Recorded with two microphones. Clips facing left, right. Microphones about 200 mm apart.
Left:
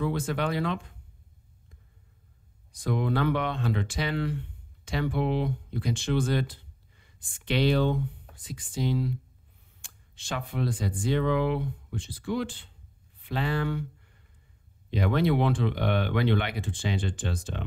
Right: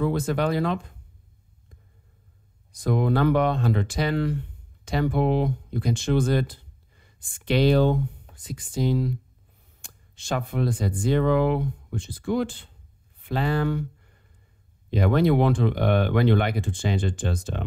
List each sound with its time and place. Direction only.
0.0 s speech: 40° right (ahead or behind)
2.7 s speech: 45° right (ahead or behind)